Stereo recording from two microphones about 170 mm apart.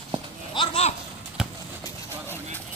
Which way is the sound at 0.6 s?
35° left (ahead or behind).